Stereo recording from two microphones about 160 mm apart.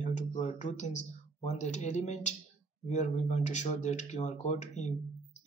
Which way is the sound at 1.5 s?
45° left (ahead or behind).